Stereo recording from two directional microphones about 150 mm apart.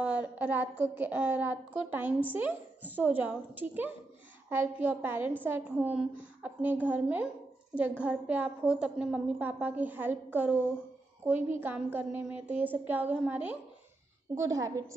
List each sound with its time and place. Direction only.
0.0 s a woman's voice: 10° right (ahead or behind)
14.3 s a woman's voice: 20° right (ahead or behind)